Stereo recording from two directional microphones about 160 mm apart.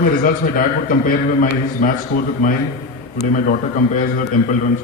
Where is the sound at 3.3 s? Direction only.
55° left (ahead or behind).